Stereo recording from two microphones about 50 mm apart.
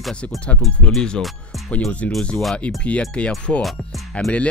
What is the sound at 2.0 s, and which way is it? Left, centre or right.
Speech, left.